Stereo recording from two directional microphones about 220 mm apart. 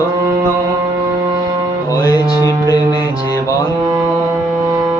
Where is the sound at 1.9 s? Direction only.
15° left (ahead or behind).